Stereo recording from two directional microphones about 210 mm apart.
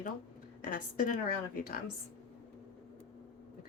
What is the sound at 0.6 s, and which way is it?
A woman's voice, 40° left (ahead or behind).